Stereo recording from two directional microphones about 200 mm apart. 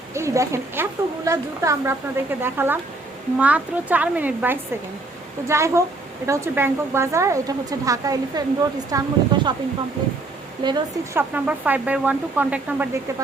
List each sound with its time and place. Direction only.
0.1 s speech: 15° right (ahead or behind)
10.6 s a woman's voice: 20° right (ahead or behind)
11.2 s speech: 5° right (ahead or behind)